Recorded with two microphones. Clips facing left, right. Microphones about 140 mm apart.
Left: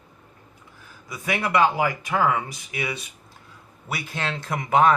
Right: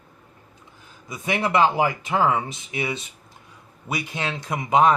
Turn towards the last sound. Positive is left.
turn(degrees=-20)  # may be behind; listen again after turning